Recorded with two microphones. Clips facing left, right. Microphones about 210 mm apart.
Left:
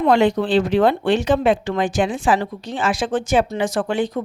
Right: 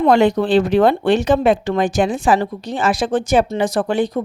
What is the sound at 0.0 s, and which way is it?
Speech, 45° right (ahead or behind).